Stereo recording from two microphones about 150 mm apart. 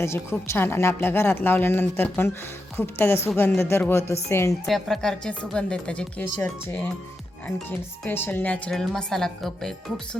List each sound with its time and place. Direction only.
0.0 s speech: 20° left (ahead or behind)
4.6 s speech: centre (ahead or behind)